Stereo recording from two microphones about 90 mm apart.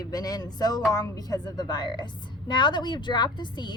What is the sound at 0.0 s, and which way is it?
A woman's voice, 45° left (ahead or behind).